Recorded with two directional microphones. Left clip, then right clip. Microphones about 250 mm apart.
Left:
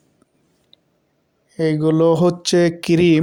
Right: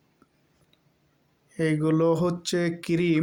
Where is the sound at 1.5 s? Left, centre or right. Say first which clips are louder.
Left 7 dB; centre.